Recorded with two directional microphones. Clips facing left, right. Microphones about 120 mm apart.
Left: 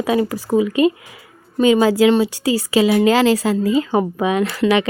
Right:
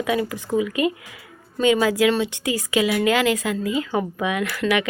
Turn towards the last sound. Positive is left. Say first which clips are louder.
# left 6 dB
turn(degrees=30)  # may be behind; listen again after turning